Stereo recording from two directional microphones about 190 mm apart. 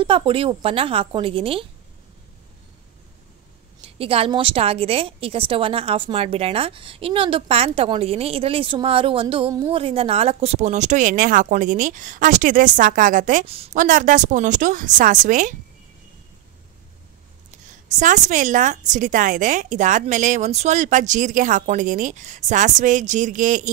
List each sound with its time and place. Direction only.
0.0 s a woman's voice: 25° right (ahead or behind)
3.8 s a woman's voice: 30° right (ahead or behind)
17.9 s a woman's voice: 40° right (ahead or behind)